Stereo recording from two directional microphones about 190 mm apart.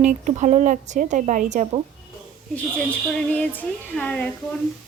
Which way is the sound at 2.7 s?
5° left (ahead or behind).